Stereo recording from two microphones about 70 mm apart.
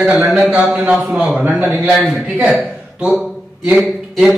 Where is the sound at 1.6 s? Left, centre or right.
Right.